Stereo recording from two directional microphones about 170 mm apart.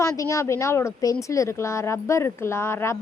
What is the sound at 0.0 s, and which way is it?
A woman's voice, 20° left (ahead or behind).